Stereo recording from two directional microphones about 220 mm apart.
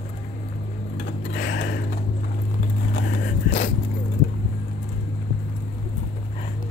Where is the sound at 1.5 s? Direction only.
50° left (ahead or behind).